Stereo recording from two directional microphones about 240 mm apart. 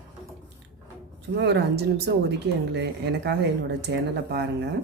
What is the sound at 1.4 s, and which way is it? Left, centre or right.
Speech, right.